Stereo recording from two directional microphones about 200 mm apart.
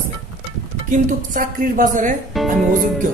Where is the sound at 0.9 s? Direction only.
45° right (ahead or behind).